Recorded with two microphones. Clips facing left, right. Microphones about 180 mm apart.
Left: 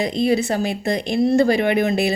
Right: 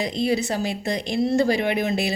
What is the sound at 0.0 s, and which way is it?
Speech, 55° left (ahead or behind).